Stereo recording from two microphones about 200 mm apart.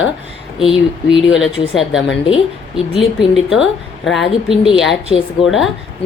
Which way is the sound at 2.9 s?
Centre (ahead or behind).